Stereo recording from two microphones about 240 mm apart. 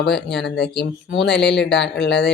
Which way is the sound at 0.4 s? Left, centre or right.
Left.